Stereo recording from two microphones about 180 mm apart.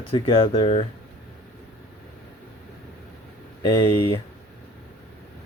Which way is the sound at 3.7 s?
15° left (ahead or behind).